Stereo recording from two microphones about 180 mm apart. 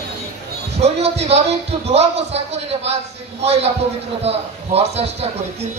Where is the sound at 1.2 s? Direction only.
35° right (ahead or behind).